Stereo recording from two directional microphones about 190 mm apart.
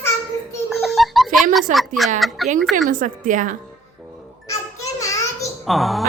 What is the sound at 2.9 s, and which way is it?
Speech, 45° right (ahead or behind).